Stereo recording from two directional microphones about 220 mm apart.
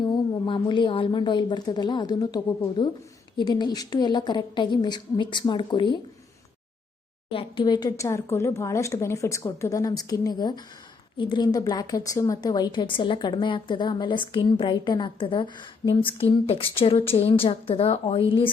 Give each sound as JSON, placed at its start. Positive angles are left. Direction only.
{"t": 0.0, "sound": "a woman's voice", "side_deg": 20}
{"t": 7.3, "sound": "a woman's voice", "side_deg": 25}